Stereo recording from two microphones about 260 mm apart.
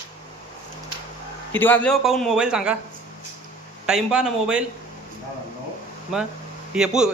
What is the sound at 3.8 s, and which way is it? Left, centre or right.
Speech, centre.